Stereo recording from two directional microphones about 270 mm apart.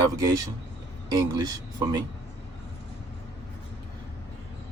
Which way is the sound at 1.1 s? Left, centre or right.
Centre.